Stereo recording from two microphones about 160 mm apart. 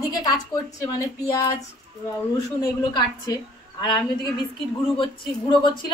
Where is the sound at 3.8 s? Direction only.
30° left (ahead or behind).